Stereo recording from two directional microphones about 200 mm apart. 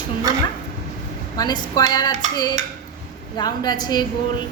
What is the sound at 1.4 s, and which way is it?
A woman's voice, 20° left (ahead or behind).